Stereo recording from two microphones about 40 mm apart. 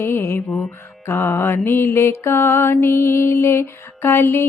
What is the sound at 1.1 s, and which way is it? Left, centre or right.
Mantra, left.